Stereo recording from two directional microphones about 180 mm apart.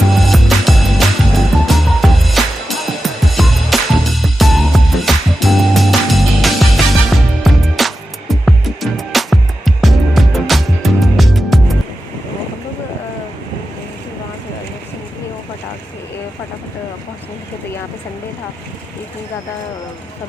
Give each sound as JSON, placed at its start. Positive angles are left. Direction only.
{"t": 0.1, "sound": "music", "side_deg": 0}